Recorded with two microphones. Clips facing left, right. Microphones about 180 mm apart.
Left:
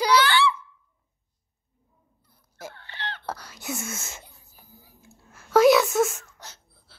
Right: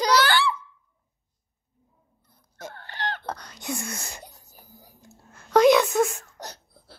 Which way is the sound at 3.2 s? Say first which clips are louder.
Right 1 dB; 5° left (ahead or behind).